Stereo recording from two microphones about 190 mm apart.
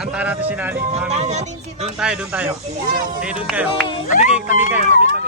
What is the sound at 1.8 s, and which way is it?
Speech, 5° right (ahead or behind).